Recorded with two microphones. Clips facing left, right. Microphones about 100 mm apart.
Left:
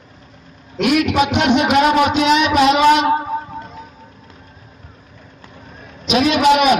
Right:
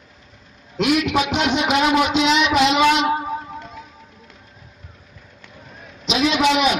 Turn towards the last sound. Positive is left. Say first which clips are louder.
# left 5 dB
turn(degrees=50)  # may be behind; listen again after turning